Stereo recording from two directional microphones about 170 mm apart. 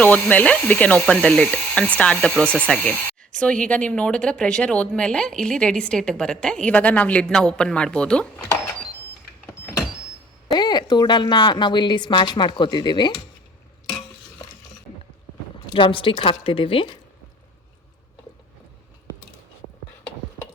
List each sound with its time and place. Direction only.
0.0 s speech: 10° left (ahead or behind)
10.5 s a woman's voice: 25° left (ahead or behind)
15.7 s a woman's voice: 30° left (ahead or behind)